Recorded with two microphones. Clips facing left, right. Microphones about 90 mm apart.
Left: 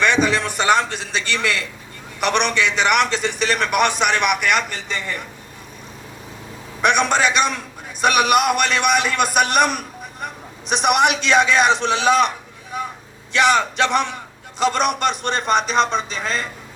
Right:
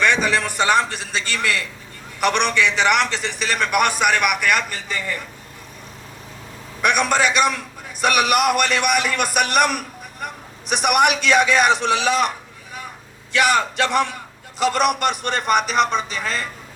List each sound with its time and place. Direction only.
0.0 s a man's voice: 20° left (ahead or behind)
6.8 s a man's voice: 20° left (ahead or behind)
13.3 s a man's voice: 20° left (ahead or behind)